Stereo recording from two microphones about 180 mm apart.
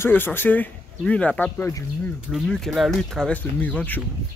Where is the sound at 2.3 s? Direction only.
Centre (ahead or behind).